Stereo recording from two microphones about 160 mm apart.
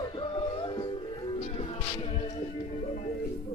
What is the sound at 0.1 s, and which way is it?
Music, 30° left (ahead or behind).